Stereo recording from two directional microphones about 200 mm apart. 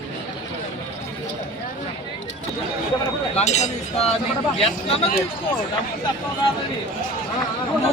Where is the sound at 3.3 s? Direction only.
35° left (ahead or behind).